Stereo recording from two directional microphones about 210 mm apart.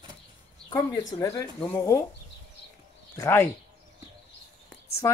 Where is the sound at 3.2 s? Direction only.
10° left (ahead or behind).